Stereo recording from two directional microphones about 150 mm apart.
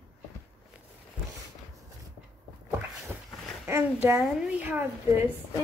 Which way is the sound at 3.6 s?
15° right (ahead or behind).